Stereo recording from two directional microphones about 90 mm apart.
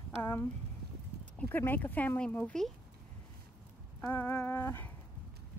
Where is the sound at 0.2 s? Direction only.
30° left (ahead or behind).